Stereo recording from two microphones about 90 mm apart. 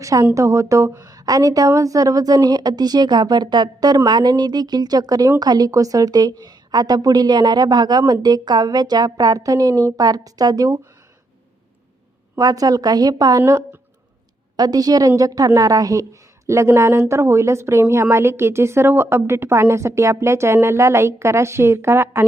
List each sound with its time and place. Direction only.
0.0 s a woman's voice: 40° right (ahead or behind)
12.4 s a woman's voice: 45° right (ahead or behind)
13.4 s speech: 30° right (ahead or behind)
14.5 s a woman's voice: 45° right (ahead or behind); by 22.3 s 30° right (ahead or behind)